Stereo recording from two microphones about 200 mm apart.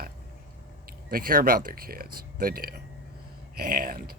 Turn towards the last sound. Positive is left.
turn(degrees=-45)  # may be behind; listen again after turning